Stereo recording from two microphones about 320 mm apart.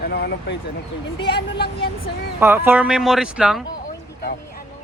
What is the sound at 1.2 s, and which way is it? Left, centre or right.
Speech, centre.